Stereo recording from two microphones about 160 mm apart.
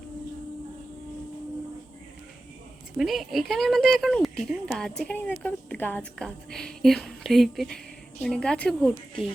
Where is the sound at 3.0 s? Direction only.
Centre (ahead or behind).